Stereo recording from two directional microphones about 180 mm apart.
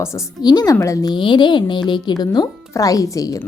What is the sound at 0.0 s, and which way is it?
Speech, 15° left (ahead or behind).